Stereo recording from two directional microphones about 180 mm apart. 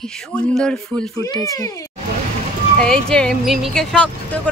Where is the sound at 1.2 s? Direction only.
15° left (ahead or behind).